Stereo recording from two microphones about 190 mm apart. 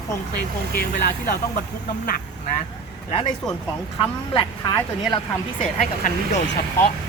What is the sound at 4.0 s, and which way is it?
Speech, 25° left (ahead or behind).